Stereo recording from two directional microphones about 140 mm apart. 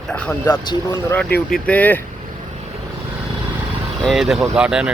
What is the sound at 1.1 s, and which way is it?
Speech, 10° left (ahead or behind).